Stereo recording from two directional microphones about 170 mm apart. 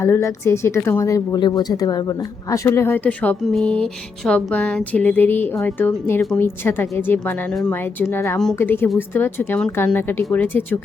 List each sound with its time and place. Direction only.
0.0 s a woman's voice: 15° left (ahead or behind)